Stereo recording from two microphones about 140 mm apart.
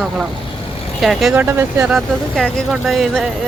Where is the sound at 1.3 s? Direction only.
15° right (ahead or behind).